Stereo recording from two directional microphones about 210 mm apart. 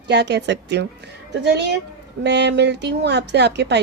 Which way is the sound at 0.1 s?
55° right (ahead or behind).